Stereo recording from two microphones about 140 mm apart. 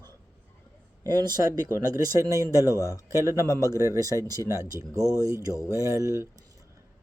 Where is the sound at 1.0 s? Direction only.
30° right (ahead or behind).